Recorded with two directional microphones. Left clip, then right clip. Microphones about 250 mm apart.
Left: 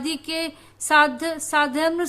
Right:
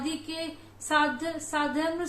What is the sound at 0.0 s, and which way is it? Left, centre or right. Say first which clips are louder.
A woman's voice: left 7 dB; left.